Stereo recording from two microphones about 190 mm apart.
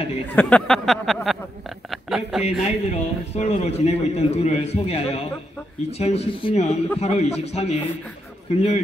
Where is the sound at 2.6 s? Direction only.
35° left (ahead or behind).